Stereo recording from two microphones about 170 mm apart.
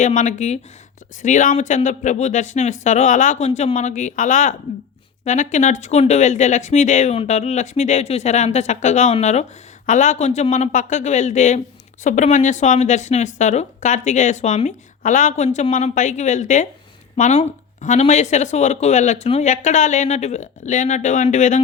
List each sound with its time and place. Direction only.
0.0 s speech: 50° left (ahead or behind)